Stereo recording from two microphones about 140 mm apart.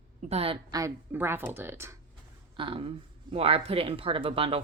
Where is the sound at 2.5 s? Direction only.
40° right (ahead or behind).